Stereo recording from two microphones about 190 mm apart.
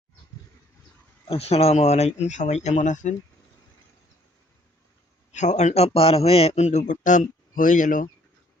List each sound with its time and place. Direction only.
1.3 s a man's voice: 30° left (ahead or behind)
5.3 s a man's voice: 40° left (ahead or behind)